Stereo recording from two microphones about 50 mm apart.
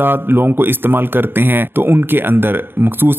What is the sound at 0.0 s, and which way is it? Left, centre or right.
Speech, right.